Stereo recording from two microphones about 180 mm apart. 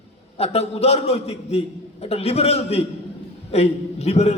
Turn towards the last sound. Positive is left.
turn(degrees=35)  # may be behind; listen again after turning